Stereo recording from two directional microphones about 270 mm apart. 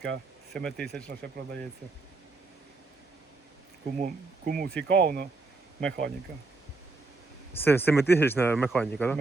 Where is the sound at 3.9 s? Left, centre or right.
Right.